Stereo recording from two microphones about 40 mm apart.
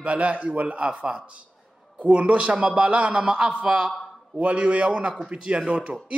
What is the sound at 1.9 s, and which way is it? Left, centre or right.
Music, right.